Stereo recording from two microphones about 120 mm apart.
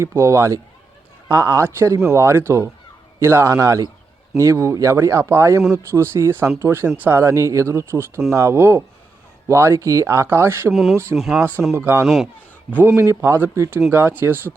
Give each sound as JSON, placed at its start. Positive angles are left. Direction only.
{"t": 0.0, "sound": "speech", "side_deg": -20}
{"t": 10.7, "sound": "speech", "side_deg": 0}
{"t": 11.8, "sound": "speech", "side_deg": -20}
{"t": 12.0, "sound": "speech", "side_deg": 0}
{"t": 12.7, "sound": "speech", "side_deg": -20}